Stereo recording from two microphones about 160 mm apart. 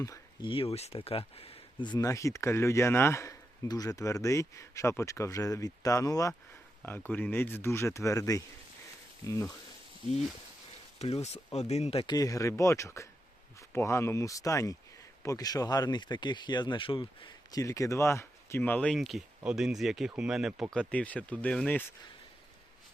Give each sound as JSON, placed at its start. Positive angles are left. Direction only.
{"t": 0.0, "sound": "speech", "side_deg": 20}
{"t": 0.5, "sound": "speech", "side_deg": 35}
{"t": 11.0, "sound": "speech", "side_deg": 40}
{"t": 12.0, "sound": "speech", "side_deg": 25}
{"t": 20.7, "sound": "speech", "side_deg": 10}